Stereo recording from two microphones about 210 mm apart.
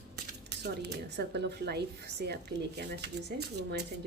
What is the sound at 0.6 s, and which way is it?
Speech, 50° right (ahead or behind).